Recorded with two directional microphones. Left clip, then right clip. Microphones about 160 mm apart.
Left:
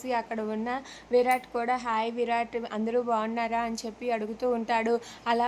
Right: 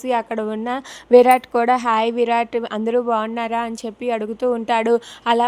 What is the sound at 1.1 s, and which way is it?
A woman's voice, 55° right (ahead or behind).